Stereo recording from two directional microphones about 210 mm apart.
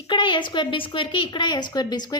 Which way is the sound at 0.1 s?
20° left (ahead or behind).